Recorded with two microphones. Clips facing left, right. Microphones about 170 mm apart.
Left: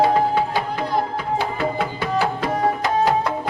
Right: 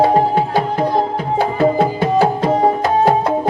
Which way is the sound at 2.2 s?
30° right (ahead or behind).